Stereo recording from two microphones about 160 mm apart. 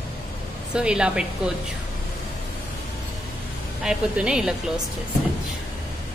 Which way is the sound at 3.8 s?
5° right (ahead or behind).